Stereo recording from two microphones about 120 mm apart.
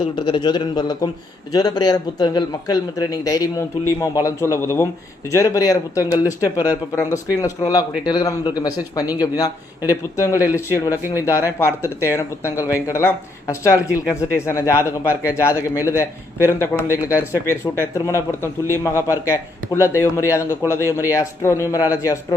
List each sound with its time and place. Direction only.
0.0 s a man's voice: 45° left (ahead or behind); by 22.2 s 25° left (ahead or behind)